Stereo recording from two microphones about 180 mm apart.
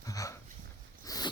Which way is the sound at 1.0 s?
20° left (ahead or behind).